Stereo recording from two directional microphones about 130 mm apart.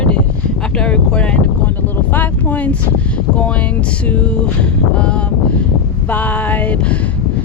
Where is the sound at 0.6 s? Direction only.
5° left (ahead or behind).